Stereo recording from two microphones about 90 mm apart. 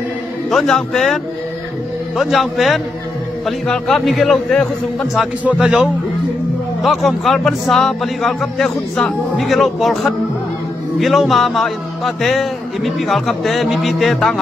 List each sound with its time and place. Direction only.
0.5 s speech: 5° left (ahead or behind)
5.4 s a man's voice: 15° right (ahead or behind)
6.8 s speech: centre (ahead or behind)